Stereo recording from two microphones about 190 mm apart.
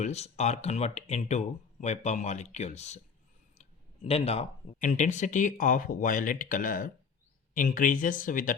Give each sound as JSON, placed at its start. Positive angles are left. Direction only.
{"t": 0.0, "sound": "speech", "side_deg": 35}